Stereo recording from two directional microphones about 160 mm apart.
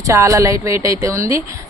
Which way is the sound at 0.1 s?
20° right (ahead or behind).